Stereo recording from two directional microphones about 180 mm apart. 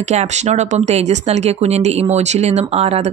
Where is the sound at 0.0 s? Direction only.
40° right (ahead or behind).